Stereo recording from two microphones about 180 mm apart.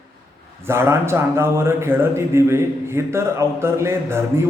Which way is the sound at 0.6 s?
15° right (ahead or behind).